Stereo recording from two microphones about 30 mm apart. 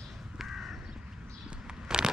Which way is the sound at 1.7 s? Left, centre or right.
Right.